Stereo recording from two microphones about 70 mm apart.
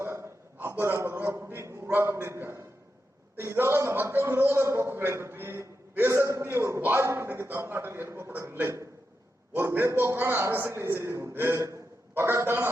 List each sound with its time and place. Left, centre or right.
0.0 s a sound: right
1.6 s a man's voice: right
6.1 s a man's voice: right